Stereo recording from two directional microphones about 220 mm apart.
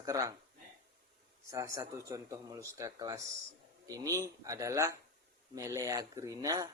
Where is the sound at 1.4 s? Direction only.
15° right (ahead or behind).